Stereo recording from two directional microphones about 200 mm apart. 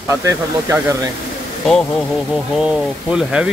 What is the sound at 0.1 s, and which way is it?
Speech, 15° right (ahead or behind).